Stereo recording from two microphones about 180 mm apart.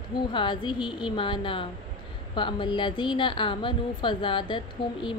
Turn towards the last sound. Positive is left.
turn(degrees=25)  # may be behind; listen again after turning